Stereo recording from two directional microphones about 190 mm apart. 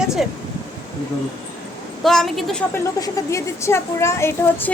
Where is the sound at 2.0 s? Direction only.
Centre (ahead or behind).